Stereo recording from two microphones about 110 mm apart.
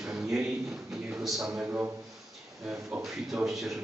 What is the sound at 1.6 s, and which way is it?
Speech, 15° right (ahead or behind).